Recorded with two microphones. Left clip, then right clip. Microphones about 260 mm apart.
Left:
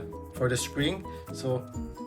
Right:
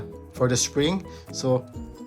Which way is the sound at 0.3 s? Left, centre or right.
Centre.